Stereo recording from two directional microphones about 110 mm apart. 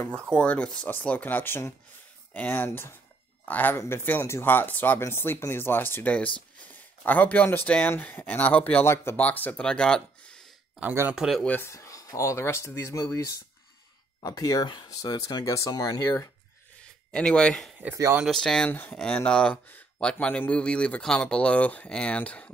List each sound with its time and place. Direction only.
0.4 s speech: 10° left (ahead or behind)
10.8 s speech: 15° right (ahead or behind)
11.1 s speech: 5° right (ahead or behind)
11.4 s speech: 15° left (ahead or behind)
11.7 s speech: 30° left (ahead or behind)
16.8 s speech: 10° left (ahead or behind)
18.7 s speech: 20° left (ahead or behind)
18.9 s speech: 10° left (ahead or behind)